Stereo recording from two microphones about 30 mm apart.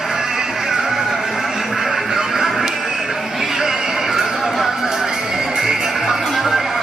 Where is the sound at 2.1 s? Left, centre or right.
Centre.